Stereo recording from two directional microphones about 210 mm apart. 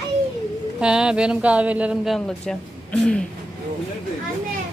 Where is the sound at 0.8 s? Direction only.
5° right (ahead or behind).